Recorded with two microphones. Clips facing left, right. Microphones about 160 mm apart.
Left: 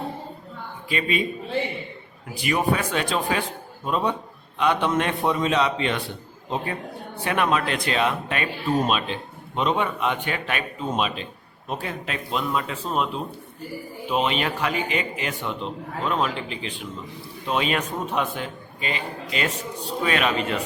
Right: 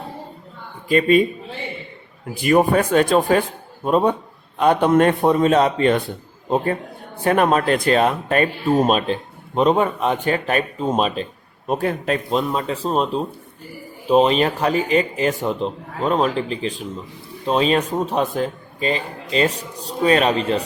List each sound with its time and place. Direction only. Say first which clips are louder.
0.9 s speech: right 11 dB; 45° right (ahead or behind)
2.3 s speech: right 8 dB; 50° right (ahead or behind)
7.3 s a man's voice: right 7 dB; 45° right (ahead or behind)
11.7 s a man's voice: right 9 dB; 50° right (ahead or behind); by 20.6 s 35° right (ahead or behind)